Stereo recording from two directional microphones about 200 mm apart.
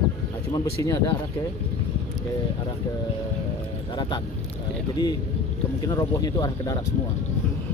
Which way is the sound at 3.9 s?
25° left (ahead or behind).